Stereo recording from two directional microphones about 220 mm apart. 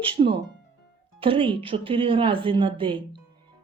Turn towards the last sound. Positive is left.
turn(degrees=-20)  # may be behind; listen again after turning